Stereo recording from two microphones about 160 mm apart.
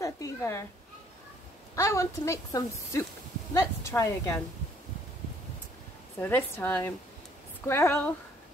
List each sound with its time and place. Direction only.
0.0 s a sound: 20° left (ahead or behind)
1.8 s a woman's voice: 20° left (ahead or behind)
6.1 s a woman's voice: 15° left (ahead or behind)